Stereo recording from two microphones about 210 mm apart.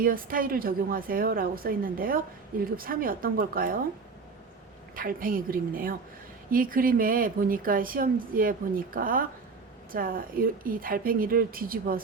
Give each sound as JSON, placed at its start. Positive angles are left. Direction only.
{"t": 0.0, "sound": "speech", "side_deg": -40}
{"t": 4.9, "sound": "speech", "side_deg": -40}